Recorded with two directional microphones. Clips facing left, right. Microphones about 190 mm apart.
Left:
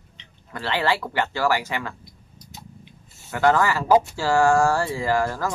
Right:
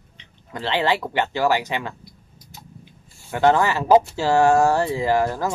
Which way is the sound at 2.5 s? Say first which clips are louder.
Even; 20° left (ahead or behind).